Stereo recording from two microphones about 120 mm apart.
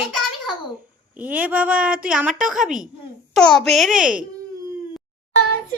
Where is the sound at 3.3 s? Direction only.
5° left (ahead or behind).